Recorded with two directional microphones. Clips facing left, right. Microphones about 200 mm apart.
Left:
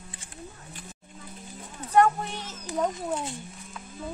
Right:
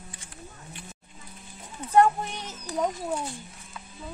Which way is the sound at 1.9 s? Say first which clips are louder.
Right 1 dB; 20° right (ahead or behind).